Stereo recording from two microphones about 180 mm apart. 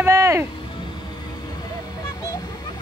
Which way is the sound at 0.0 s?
15° right (ahead or behind).